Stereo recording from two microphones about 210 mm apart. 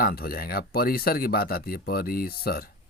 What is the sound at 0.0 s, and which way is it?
Speech, 45° left (ahead or behind).